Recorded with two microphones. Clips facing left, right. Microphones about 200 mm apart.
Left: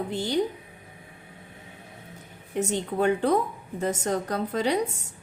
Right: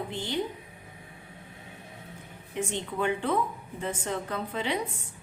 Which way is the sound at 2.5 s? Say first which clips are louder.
Left 5 dB; 40° left (ahead or behind).